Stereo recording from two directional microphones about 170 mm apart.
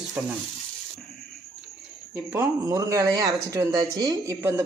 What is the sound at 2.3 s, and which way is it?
Speech, 15° right (ahead or behind).